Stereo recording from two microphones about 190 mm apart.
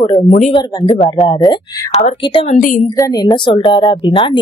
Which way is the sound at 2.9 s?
20° left (ahead or behind).